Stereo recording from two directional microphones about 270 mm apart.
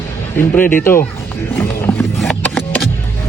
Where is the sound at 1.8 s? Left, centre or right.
Centre.